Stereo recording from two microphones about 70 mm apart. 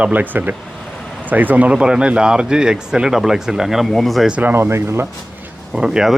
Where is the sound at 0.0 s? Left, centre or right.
Right; by 4.3 s centre.